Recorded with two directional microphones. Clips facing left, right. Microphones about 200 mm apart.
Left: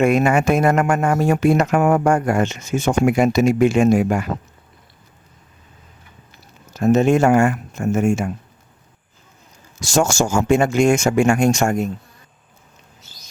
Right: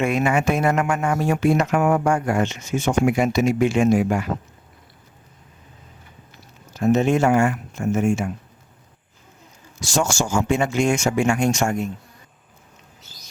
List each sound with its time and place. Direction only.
0.0 s speech: 45° left (ahead or behind)
6.7 s speech: 45° left (ahead or behind)
9.8 s speech: 45° left (ahead or behind)